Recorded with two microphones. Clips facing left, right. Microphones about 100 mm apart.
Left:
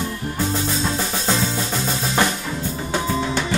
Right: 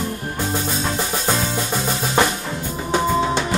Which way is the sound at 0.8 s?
15° right (ahead or behind).